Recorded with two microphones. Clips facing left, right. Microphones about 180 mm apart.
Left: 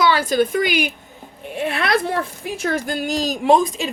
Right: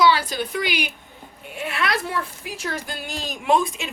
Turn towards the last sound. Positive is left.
turn(degrees=35)  # may be behind; listen again after turning